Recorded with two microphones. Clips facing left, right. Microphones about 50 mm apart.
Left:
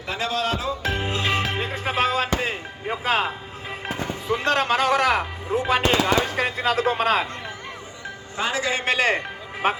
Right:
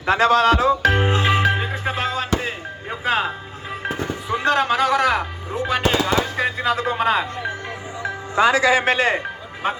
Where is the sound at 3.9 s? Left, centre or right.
Centre.